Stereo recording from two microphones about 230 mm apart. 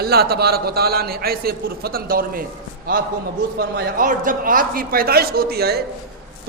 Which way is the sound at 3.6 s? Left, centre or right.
Right.